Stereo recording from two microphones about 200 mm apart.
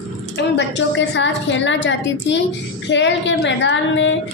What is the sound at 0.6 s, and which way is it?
A woman's voice, 65° left (ahead or behind).